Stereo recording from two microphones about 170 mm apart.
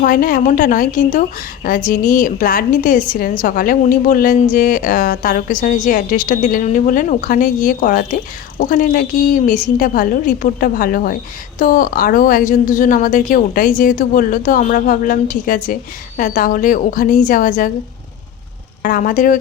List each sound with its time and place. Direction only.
0.0 s a woman's voice: 55° left (ahead or behind)
18.8 s a woman's voice: 55° left (ahead or behind)